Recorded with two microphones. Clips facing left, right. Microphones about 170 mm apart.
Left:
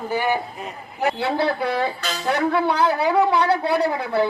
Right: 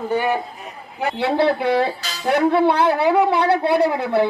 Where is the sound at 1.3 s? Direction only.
70° right (ahead or behind).